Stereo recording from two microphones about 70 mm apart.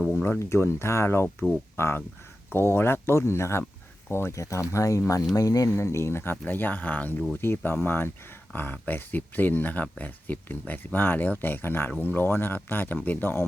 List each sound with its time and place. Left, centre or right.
0.1 s speech: left
4.4 s speech: left
5.7 s speech: left
6.4 s speech: left